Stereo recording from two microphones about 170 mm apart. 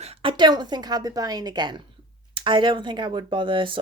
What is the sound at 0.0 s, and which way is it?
A woman's voice, 30° right (ahead or behind).